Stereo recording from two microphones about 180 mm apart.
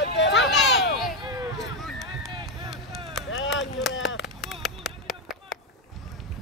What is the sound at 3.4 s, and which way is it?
Chop, 90° left.